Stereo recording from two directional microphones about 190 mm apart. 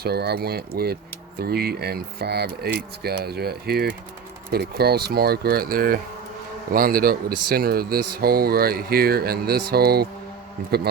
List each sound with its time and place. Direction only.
0.0 s a man's voice: 55° right (ahead or behind)